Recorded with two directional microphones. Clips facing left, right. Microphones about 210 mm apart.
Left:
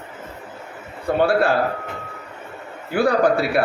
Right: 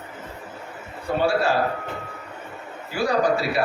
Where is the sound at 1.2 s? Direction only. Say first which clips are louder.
Left 4 dB; 55° left (ahead or behind).